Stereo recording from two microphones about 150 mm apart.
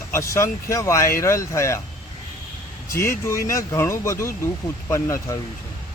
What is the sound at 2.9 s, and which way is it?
Speech, 15° left (ahead or behind).